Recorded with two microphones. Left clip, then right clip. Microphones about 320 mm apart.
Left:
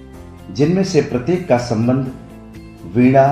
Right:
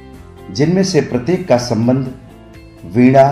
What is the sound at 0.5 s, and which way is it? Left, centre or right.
Speech, centre.